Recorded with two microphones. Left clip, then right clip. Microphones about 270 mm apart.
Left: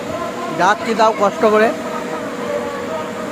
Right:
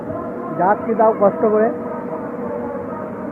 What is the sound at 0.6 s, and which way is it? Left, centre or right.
Speech, left.